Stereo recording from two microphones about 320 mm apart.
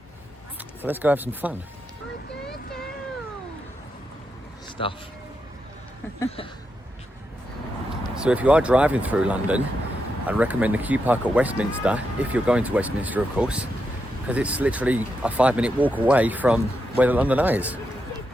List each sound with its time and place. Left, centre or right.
0.8 s speech: centre
4.8 s speech: centre
6.1 s speech: centre
8.1 s speech: centre